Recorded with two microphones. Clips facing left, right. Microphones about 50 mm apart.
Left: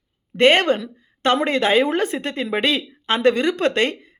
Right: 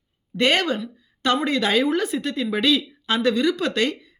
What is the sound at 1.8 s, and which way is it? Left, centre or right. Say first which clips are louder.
Speech: left 1 dB; left.